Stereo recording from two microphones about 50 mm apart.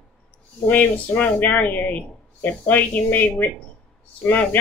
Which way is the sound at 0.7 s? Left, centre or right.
Left.